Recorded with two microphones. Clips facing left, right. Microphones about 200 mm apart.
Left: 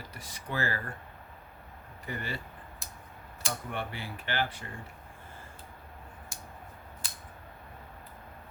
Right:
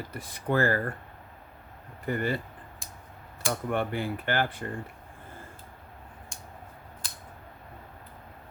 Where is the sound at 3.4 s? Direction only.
55° right (ahead or behind).